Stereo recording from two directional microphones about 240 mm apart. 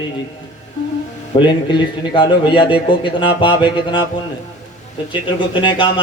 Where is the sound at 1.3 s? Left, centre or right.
Left.